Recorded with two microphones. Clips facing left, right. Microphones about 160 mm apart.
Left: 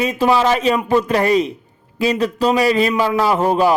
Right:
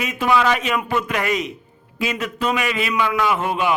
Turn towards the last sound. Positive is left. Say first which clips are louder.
# left 6 dB
turn(degrees=35)  # may be behind; listen again after turning